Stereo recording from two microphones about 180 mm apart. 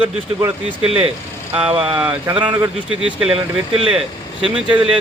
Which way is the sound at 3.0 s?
5° right (ahead or behind).